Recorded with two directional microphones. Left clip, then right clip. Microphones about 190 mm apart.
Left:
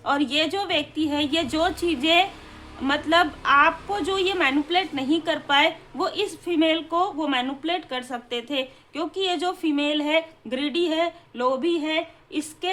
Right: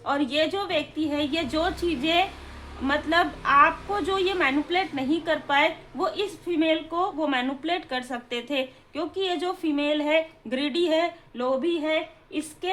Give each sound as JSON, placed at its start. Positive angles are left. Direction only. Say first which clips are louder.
{"t": 0.0, "sound": "a woman's voice", "louder": "left 2 dB", "side_deg": 20}